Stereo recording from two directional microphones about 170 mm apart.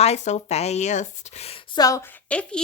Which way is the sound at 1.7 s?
20° left (ahead or behind).